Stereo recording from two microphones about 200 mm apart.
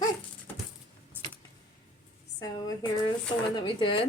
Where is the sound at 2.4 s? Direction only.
20° left (ahead or behind).